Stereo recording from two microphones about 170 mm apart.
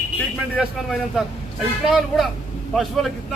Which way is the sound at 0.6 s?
Centre (ahead or behind).